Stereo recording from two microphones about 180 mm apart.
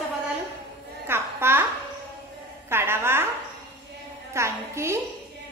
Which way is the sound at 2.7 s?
15° right (ahead or behind).